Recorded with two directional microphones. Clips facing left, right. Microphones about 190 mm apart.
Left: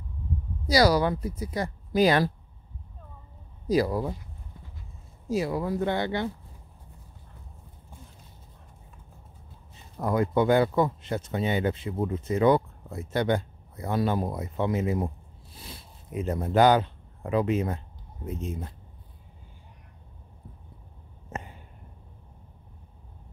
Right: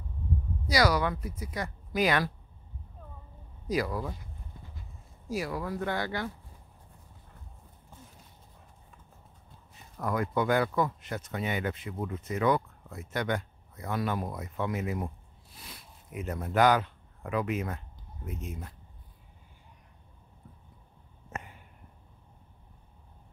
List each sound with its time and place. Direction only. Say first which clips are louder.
0.7 s speech: left 5 dB; 35° left (ahead or behind)
3.6 s speech: left 6 dB; 30° left (ahead or behind)
5.3 s speech: left 6 dB; 25° left (ahead or behind)
9.8 s speech: left 5 dB; 25° left (ahead or behind)
21.3 s a sound: left 4 dB; 30° left (ahead or behind)